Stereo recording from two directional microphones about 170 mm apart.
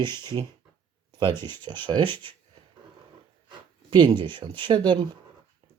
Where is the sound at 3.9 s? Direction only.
30° right (ahead or behind).